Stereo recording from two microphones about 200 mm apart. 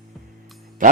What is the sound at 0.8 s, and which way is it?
Speech, 40° right (ahead or behind).